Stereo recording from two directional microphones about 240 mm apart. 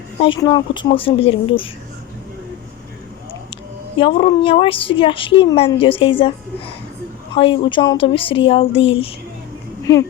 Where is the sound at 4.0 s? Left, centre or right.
Left.